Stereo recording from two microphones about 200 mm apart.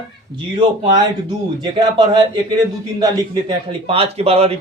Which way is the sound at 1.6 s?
20° right (ahead or behind).